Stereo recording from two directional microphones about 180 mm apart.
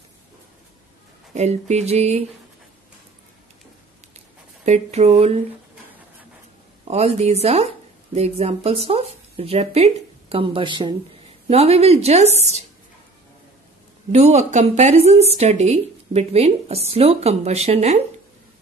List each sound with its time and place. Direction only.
1.3 s speech: 40° right (ahead or behind)
4.6 s speech: 40° right (ahead or behind)
6.8 s speech: 35° right (ahead or behind)
14.1 s speech: 40° right (ahead or behind)